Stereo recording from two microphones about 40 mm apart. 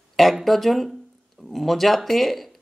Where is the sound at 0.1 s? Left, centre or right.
Centre.